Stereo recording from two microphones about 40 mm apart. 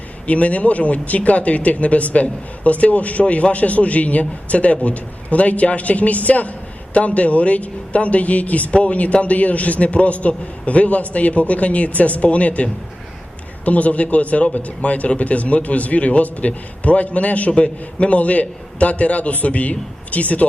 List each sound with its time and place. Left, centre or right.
0.3 s speech: left
13.7 s speech: left